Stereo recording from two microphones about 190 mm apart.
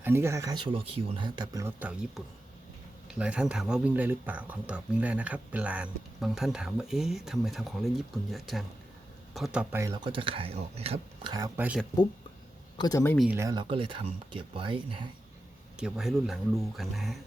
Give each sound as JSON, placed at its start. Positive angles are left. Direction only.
{"t": 0.0, "sound": "speech", "side_deg": -10}
{"t": 9.8, "sound": "speech", "side_deg": -25}
{"t": 12.7, "sound": "speech", "side_deg": 20}
{"t": 13.1, "sound": "speech", "side_deg": -10}
{"t": 15.8, "sound": "speech", "side_deg": 0}